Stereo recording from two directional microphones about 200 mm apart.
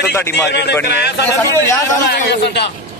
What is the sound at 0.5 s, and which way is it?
Speech, 55° left (ahead or behind).